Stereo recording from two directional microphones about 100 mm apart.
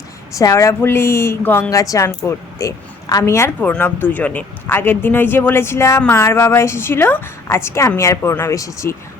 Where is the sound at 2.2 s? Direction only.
35° left (ahead or behind).